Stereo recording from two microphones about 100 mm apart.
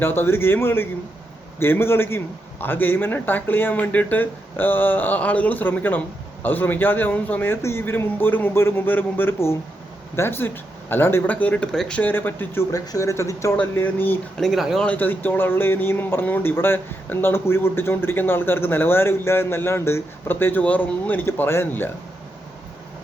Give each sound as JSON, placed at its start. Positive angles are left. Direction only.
{"t": 0.0, "sound": "a man's voice", "side_deg": 20}
{"t": 12.7, "sound": "speech", "side_deg": 35}
{"t": 13.6, "sound": "a man's voice", "side_deg": 20}
{"t": 14.3, "sound": "speech", "side_deg": 0}
{"t": 14.8, "sound": "a man's voice", "side_deg": 20}